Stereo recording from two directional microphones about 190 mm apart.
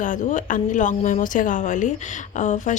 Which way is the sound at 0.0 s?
40° left (ahead or behind).